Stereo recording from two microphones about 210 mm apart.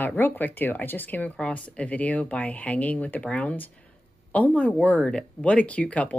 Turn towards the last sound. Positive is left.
turn(degrees=5)  # may be behind; listen again after turning